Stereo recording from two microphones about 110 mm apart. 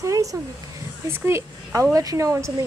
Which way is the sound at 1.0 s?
25° right (ahead or behind).